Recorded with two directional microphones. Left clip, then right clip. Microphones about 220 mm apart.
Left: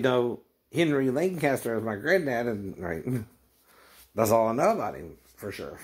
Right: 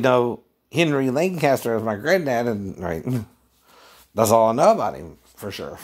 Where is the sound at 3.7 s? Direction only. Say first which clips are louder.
Right 6 dB; 50° right (ahead or behind).